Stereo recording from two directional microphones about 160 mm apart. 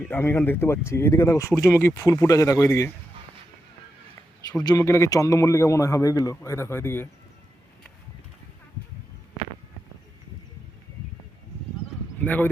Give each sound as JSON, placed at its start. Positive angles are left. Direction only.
{"t": 0.0, "sound": "a man's voice", "side_deg": 15}
{"t": 4.6, "sound": "a man's voice", "side_deg": 20}
{"t": 12.2, "sound": "speech", "side_deg": 10}